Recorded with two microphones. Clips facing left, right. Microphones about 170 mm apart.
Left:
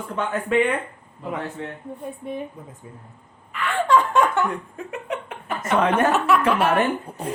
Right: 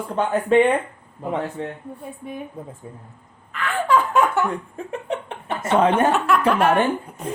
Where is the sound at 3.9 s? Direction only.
5° right (ahead or behind).